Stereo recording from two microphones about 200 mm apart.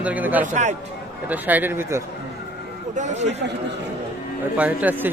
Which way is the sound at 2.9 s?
35° right (ahead or behind).